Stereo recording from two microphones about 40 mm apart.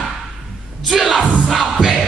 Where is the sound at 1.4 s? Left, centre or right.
Centre.